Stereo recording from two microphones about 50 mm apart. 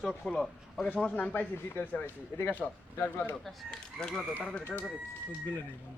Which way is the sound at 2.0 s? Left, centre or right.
Left.